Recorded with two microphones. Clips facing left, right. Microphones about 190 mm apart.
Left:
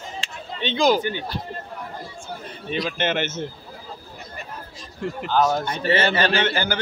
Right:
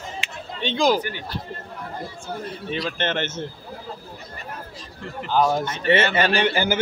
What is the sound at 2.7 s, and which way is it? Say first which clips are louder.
Speech: left 2 dB; 5° left (ahead or behind).